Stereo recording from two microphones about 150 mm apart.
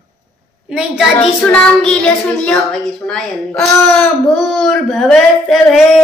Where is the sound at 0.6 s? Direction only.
5° right (ahead or behind).